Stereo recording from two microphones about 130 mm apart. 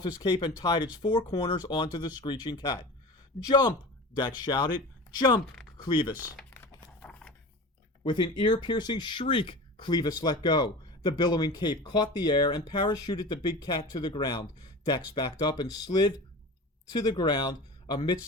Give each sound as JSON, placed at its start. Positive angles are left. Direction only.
{"t": 0.2, "sound": "speech", "side_deg": 35}
{"t": 6.5, "sound": "a sound", "side_deg": 15}
{"t": 8.0, "sound": "speech", "side_deg": 35}